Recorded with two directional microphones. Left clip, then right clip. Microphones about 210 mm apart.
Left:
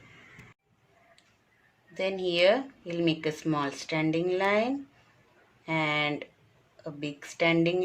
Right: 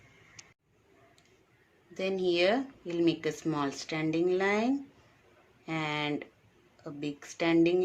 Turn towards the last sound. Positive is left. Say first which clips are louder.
# left 1 dB
turn(degrees=-15)  # may be behind; listen again after turning